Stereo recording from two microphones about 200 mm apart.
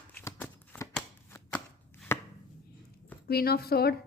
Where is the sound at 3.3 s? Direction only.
50° left (ahead or behind).